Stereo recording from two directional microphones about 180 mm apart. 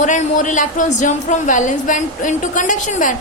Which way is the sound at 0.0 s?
45° left (ahead or behind).